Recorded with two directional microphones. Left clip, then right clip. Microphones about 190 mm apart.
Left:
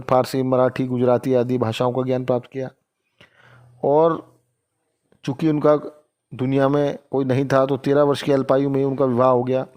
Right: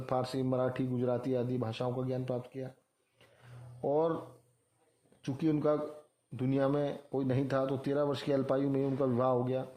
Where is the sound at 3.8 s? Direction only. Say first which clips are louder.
Left 14 dB; 40° left (ahead or behind).